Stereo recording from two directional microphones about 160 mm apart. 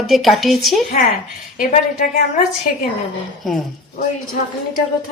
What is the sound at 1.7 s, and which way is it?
Speech, 50° left (ahead or behind).